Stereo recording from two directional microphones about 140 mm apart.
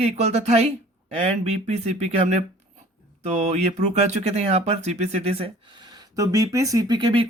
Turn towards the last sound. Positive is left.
turn(degrees=-35)  # may be behind; listen again after turning